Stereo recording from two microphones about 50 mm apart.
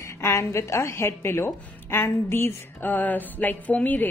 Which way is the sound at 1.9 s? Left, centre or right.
Left.